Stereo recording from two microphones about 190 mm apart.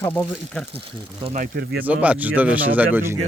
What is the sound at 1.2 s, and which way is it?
Speech, 35° right (ahead or behind).